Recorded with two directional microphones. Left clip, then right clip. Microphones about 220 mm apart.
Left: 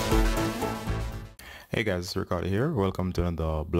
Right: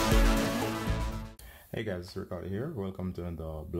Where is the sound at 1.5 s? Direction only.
25° left (ahead or behind).